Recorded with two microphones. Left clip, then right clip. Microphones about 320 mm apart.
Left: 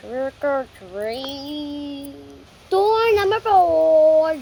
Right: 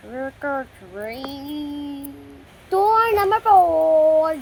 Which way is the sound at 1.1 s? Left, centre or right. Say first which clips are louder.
Left 3 dB; left.